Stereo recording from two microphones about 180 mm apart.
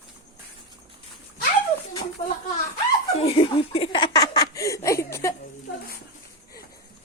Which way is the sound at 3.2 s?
30° left (ahead or behind).